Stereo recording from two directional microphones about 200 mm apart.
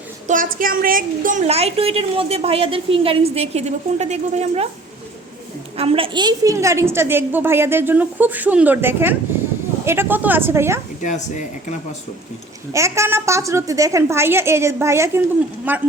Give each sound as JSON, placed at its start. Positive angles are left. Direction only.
{"t": 0.3, "sound": "a woman's voice", "side_deg": -45}
{"t": 5.7, "sound": "a woman's voice", "side_deg": -30}
{"t": 11.0, "sound": "speech", "side_deg": 40}
{"t": 12.7, "sound": "a woman's voice", "side_deg": -15}